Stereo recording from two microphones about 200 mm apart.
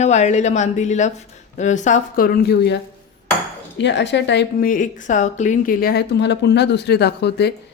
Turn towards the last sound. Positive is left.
turn(degrees=55)  # may be behind; listen again after turning